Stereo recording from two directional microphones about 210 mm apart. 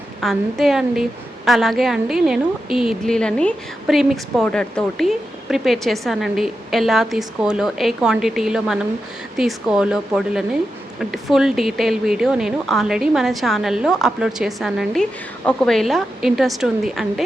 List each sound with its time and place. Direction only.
0.2 s a woman's voice: centre (ahead or behind)